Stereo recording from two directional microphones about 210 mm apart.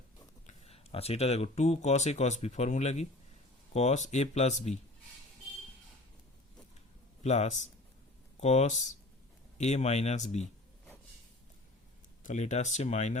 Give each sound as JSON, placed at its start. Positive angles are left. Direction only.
{"t": 0.4, "sound": "speech", "side_deg": 30}
{"t": 7.2, "sound": "speech", "side_deg": 30}
{"t": 12.2, "sound": "speech", "side_deg": 35}